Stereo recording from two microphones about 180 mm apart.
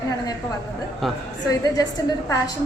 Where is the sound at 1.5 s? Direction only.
20° left (ahead or behind).